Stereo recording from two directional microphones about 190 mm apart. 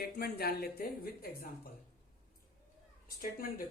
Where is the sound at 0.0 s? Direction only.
55° left (ahead or behind).